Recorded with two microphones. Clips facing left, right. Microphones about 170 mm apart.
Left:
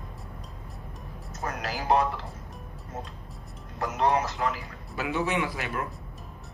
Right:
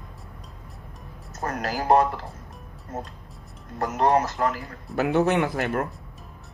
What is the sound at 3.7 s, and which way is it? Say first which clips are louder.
A man's voice: right 4 dB; 45° right (ahead or behind).